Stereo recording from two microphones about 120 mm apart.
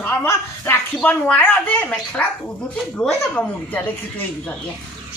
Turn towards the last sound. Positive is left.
turn(degrees=15)  # may be behind; listen again after turning